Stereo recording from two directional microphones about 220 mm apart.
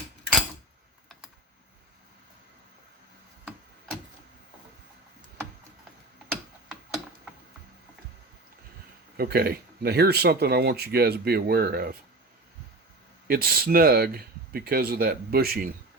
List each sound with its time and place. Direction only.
9.1 s speech: 45° right (ahead or behind)
13.2 s speech: 45° right (ahead or behind)